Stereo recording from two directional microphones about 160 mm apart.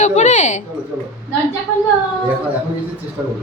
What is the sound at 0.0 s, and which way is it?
Speech, 50° left (ahead or behind).